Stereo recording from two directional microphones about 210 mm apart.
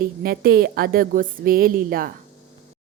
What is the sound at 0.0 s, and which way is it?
A woman's voice, 45° right (ahead or behind).